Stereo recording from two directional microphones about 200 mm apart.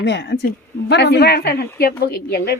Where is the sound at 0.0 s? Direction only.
60° left (ahead or behind).